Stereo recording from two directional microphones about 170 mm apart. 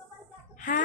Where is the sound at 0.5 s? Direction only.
50° left (ahead or behind).